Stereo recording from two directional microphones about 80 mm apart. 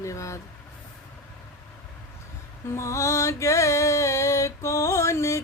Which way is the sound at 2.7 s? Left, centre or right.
Left.